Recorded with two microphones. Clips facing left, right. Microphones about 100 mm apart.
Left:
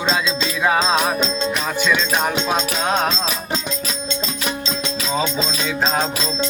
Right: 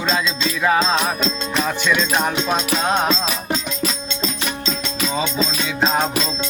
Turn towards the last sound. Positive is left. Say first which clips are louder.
# right 1 dB
turn(degrees=-5)  # may be behind; listen again after turning